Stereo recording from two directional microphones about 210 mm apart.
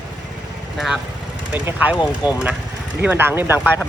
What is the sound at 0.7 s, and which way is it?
Speech, centre (ahead or behind).